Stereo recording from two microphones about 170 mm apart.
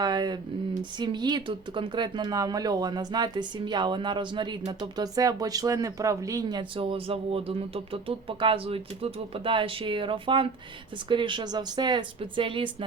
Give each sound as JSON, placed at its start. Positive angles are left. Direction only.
{"t": 0.0, "sound": "speech", "side_deg": -25}